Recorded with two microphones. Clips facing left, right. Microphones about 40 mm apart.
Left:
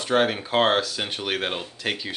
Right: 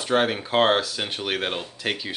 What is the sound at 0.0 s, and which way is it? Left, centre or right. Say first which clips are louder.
Speech: even; centre.